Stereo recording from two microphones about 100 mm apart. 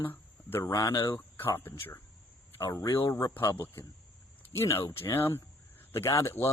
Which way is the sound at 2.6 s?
40° left (ahead or behind).